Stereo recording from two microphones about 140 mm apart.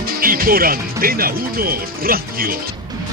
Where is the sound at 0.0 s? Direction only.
90° right.